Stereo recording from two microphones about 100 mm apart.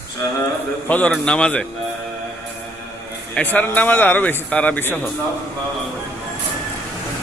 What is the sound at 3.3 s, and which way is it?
Speech, 15° left (ahead or behind).